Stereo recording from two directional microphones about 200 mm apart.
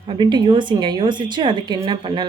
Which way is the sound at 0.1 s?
20° right (ahead or behind).